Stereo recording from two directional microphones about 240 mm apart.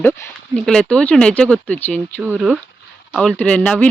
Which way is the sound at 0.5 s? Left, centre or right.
Centre.